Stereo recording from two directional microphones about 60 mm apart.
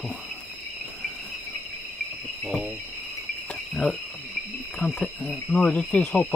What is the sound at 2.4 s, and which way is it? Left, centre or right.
Cricket, centre.